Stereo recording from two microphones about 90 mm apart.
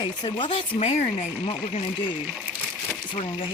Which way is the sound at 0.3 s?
75° left (ahead or behind).